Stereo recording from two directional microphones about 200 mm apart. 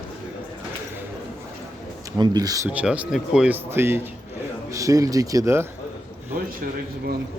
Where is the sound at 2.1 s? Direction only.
20° right (ahead or behind).